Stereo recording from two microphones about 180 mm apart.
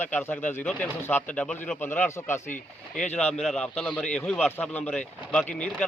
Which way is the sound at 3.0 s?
40° left (ahead or behind).